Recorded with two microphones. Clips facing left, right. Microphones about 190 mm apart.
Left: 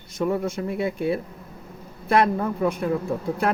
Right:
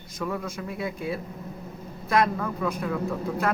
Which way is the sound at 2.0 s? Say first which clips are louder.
Left 4 dB; 30° left (ahead or behind).